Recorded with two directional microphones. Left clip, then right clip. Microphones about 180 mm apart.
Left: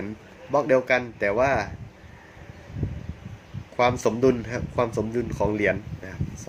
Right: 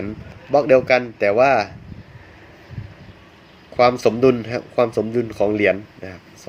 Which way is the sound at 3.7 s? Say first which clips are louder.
Right 7 dB; 15° right (ahead or behind).